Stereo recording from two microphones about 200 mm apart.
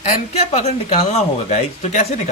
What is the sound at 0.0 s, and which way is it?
Speech, 35° left (ahead or behind).